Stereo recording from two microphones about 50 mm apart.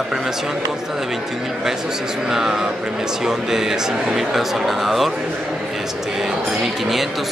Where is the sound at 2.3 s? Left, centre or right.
Centre.